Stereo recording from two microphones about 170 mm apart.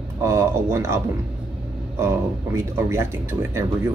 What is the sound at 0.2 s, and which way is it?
Speech, 15° right (ahead or behind).